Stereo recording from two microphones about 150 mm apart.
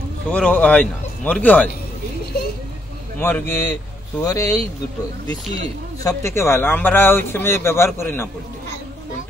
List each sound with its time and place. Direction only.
0.3 s a man's voice: 10° left (ahead or behind)
3.2 s a man's voice: 15° left (ahead or behind)